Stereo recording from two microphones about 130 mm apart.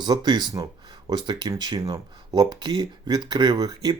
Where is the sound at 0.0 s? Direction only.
30° right (ahead or behind).